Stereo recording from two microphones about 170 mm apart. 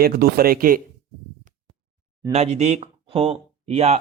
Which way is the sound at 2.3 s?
40° right (ahead or behind).